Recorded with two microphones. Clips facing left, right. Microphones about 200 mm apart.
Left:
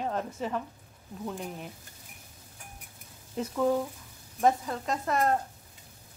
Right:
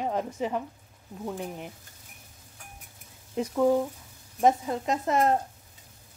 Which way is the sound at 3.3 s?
15° right (ahead or behind).